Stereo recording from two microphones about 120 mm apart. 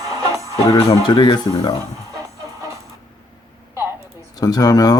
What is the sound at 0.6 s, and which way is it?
Speech, 30° left (ahead or behind).